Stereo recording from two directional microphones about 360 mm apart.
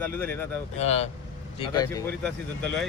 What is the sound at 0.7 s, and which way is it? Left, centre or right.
Speech, centre.